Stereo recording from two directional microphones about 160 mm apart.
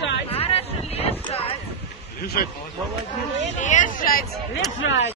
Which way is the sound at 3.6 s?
50° left (ahead or behind).